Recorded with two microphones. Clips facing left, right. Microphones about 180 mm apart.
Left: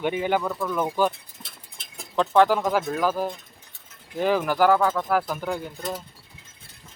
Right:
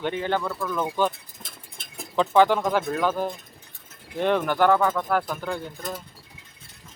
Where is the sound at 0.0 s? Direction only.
10° left (ahead or behind).